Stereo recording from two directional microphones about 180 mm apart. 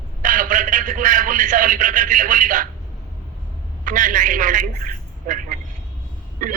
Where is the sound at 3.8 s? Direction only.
50° right (ahead or behind).